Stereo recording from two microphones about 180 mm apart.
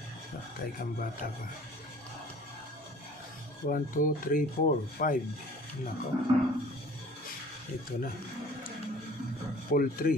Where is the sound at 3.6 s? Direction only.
50° left (ahead or behind).